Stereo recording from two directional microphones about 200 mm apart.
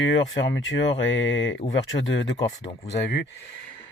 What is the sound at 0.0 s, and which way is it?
Speech, 70° left (ahead or behind).